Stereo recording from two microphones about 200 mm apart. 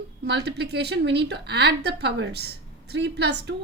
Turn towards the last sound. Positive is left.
turn(degrees=-55)  # may be behind; listen again after turning